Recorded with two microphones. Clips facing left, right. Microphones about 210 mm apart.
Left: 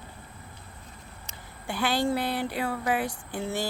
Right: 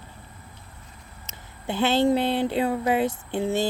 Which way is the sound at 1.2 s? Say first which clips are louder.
Right 5 dB; 25° right (ahead or behind).